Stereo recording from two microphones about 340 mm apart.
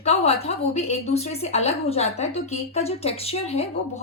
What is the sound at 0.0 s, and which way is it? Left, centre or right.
A woman's voice, centre.